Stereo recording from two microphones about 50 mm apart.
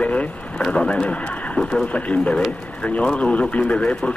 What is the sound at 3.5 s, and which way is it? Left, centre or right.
Speech, left.